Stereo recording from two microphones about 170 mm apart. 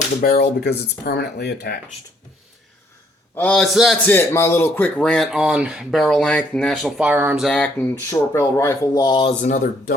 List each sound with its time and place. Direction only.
0.2 s speech: 65° left (ahead or behind)
3.3 s speech: 5° left (ahead or behind)
4.1 s speech: 15° left (ahead or behind); by 7.4 s 10° right (ahead or behind)
7.4 s speech: 10° left (ahead or behind); by 9.3 s 25° left (ahead or behind)
9.4 s speech: 45° left (ahead or behind)